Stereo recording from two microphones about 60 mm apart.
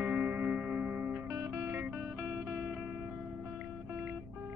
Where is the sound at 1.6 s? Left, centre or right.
Right.